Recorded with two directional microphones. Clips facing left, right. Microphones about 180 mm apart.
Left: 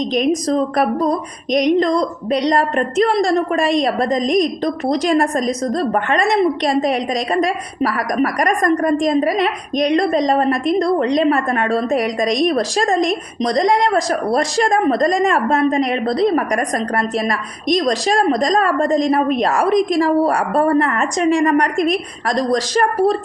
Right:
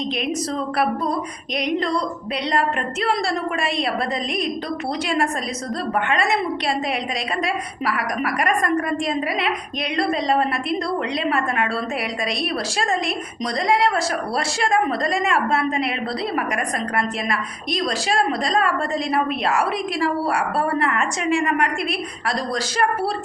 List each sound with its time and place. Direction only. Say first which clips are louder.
0.4 s a woman's voice: left 6 dB; 40° left (ahead or behind)